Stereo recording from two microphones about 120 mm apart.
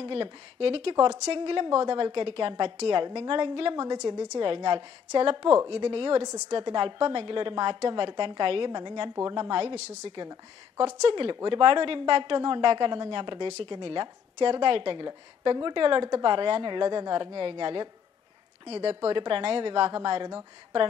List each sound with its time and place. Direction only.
0.0 s speech: 45° right (ahead or behind)
0.9 s a woman's voice: 35° right (ahead or behind)
1.2 s speech: 50° right (ahead or behind)
3.7 s a woman's voice: 35° right (ahead or behind)
4.4 s a woman's voice: 40° right (ahead or behind)
6.2 s a woman's voice: 35° right (ahead or behind)
9.8 s a woman's voice: 65° right (ahead or behind)
11.0 s a woman's voice: 50° right (ahead or behind)